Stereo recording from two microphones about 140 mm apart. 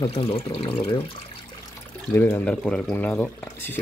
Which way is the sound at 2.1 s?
15° left (ahead or behind).